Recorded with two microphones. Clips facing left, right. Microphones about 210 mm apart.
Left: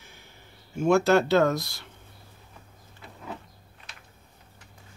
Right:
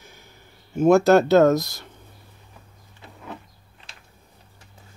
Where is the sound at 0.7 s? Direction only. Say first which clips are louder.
Right 5 dB; 40° right (ahead or behind).